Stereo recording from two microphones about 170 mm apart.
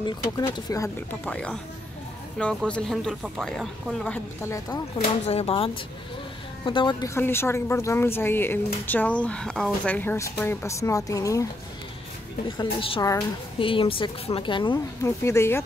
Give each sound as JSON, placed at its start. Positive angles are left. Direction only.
{"t": 0.0, "sound": "speech", "side_deg": 25}
{"t": 1.3, "sound": "speech", "side_deg": 5}
{"t": 4.4, "sound": "speech", "side_deg": 20}
{"t": 5.2, "sound": "a woman's voice", "side_deg": 35}
{"t": 7.2, "sound": "speech", "side_deg": 15}
{"t": 12.4, "sound": "a woman's voice", "side_deg": 30}
{"t": 15.0, "sound": "speech", "side_deg": 15}